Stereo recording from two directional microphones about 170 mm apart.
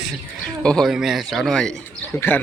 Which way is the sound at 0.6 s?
5° left (ahead or behind).